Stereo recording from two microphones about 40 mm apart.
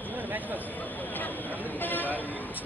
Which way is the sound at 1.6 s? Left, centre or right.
Left.